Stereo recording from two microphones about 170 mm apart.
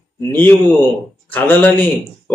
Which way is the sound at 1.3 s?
10° left (ahead or behind).